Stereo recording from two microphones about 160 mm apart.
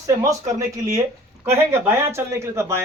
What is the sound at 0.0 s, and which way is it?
Speech, 20° right (ahead or behind).